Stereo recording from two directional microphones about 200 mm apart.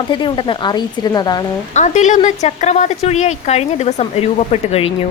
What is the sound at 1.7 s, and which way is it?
A woman's voice, 35° left (ahead or behind).